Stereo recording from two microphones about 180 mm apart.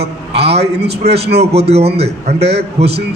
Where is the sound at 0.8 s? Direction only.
65° right (ahead or behind).